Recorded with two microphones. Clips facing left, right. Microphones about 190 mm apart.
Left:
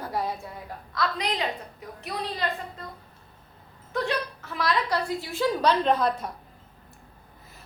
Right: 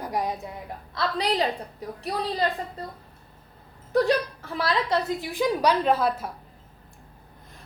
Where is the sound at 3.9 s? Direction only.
35° right (ahead or behind); by 6.3 s 5° right (ahead or behind).